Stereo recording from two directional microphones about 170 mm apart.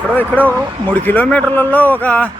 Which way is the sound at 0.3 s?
10° right (ahead or behind).